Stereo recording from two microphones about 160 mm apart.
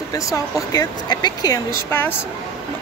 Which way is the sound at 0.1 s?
20° left (ahead or behind).